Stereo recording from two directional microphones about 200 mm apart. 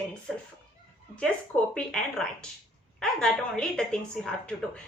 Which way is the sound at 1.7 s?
5° left (ahead or behind).